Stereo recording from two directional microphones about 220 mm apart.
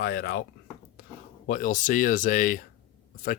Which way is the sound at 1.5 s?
35° left (ahead or behind).